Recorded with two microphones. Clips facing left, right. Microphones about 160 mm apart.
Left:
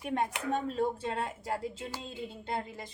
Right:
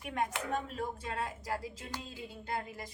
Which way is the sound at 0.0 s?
30° left (ahead or behind).